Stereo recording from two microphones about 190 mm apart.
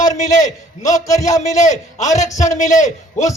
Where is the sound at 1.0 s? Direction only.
15° left (ahead or behind).